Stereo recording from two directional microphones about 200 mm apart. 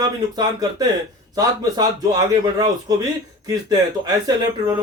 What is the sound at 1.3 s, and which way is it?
A man's voice, 20° right (ahead or behind).